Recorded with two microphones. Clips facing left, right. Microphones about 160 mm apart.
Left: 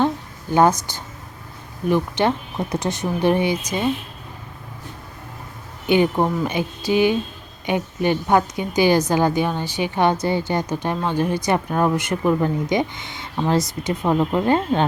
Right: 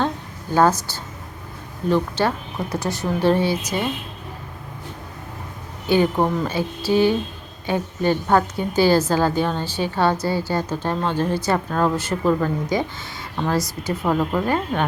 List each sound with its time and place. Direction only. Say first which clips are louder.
0.5 s a woman's voice: left 1 dB; 15° left (ahead or behind)
5.8 s a woman's voice: left 1 dB; 20° left (ahead or behind)